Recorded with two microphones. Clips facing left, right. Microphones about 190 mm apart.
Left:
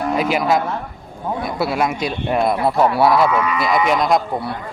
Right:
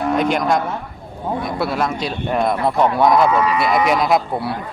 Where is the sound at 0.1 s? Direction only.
5° left (ahead or behind).